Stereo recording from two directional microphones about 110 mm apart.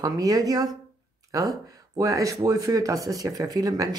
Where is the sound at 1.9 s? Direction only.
35° right (ahead or behind).